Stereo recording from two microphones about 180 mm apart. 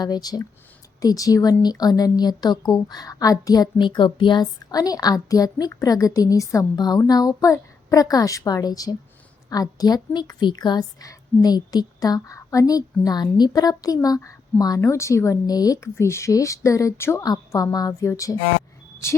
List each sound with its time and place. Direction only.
0.0 s speech: 20° left (ahead or behind)